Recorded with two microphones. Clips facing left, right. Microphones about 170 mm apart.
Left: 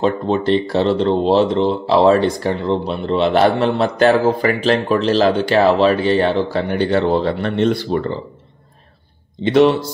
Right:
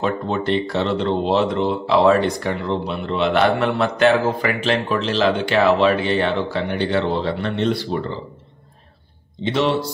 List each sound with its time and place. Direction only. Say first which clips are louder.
0.0 s speech: left 5 dB; 30° left (ahead or behind); by 8.0 s 50° left (ahead or behind)
9.4 s speech: left 7 dB; 50° left (ahead or behind)